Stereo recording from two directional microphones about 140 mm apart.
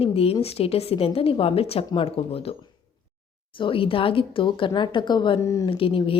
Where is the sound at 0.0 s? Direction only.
45° left (ahead or behind).